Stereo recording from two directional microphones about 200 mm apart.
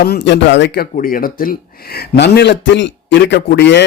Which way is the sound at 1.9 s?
55° left (ahead or behind).